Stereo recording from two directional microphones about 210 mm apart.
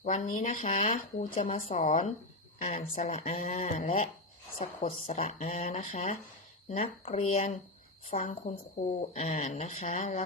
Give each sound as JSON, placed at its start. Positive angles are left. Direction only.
{"t": 0.0, "sound": "speech", "side_deg": 35}